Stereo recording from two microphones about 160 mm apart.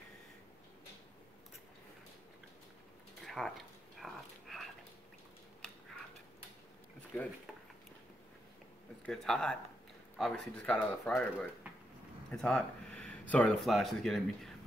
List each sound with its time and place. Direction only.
3.3 s a sound: centre (ahead or behind)
7.1 s a man's voice: 10° left (ahead or behind)
9.0 s a man's voice: centre (ahead or behind)